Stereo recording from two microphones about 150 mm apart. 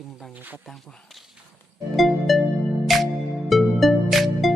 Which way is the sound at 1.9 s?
Centre (ahead or behind).